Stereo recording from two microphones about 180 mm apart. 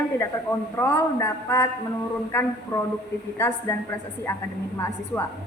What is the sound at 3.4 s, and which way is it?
Speech, 15° left (ahead or behind).